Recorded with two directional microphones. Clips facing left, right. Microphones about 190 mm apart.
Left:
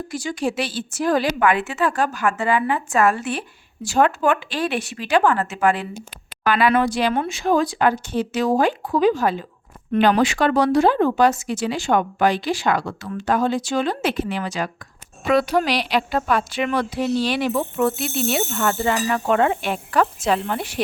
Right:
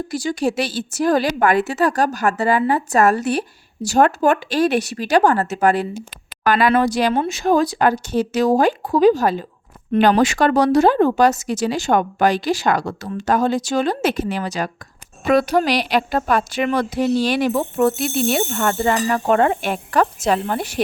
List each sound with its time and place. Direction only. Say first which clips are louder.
0.1 s a woman's voice: right 3 dB; 35° right (ahead or behind)